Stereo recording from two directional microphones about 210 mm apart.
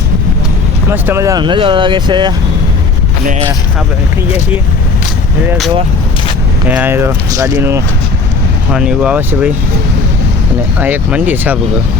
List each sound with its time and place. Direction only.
0.9 s speech: 10° right (ahead or behind)
6.7 s speech: 10° right (ahead or behind)
10.8 s speech: 10° right (ahead or behind)